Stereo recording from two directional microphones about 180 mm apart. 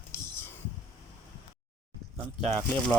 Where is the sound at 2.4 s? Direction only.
10° left (ahead or behind).